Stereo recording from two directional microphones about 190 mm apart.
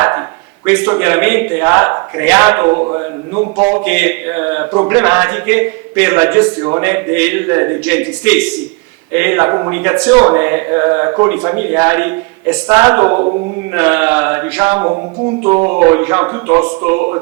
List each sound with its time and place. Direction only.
0.6 s speech: 15° right (ahead or behind)
3.8 s speech: 10° right (ahead or behind)